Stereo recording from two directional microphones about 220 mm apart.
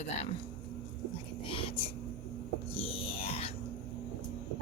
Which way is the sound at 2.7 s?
25° left (ahead or behind).